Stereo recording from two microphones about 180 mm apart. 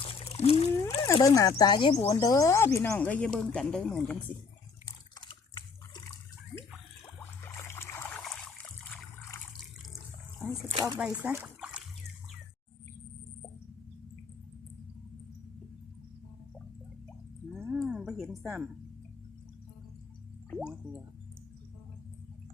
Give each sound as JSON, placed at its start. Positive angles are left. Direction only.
{"t": 0.0, "sound": "splash", "side_deg": 30}
{"t": 1.0, "sound": "a woman's voice", "side_deg": 20}
{"t": 4.9, "sound": "water", "side_deg": 25}
{"t": 7.2, "sound": "boat", "side_deg": 15}
{"t": 8.2, "sound": "trickle", "side_deg": 5}
{"t": 10.7, "sound": "speech", "side_deg": -20}
{"t": 10.9, "sound": "speech", "side_deg": -10}
{"t": 17.5, "sound": "a sound", "side_deg": -5}
{"t": 20.6, "sound": "speech", "side_deg": -5}